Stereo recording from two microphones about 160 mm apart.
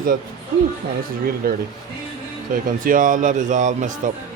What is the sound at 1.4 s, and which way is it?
Speech, 65° right (ahead or behind).